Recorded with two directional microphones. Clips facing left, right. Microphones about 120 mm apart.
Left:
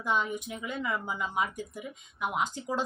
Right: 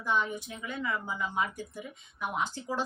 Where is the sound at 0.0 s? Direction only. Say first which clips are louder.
Left 1 dB; 15° left (ahead or behind).